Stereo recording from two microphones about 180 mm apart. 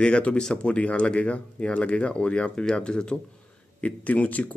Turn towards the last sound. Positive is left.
turn(degrees=10)  # may be behind; listen again after turning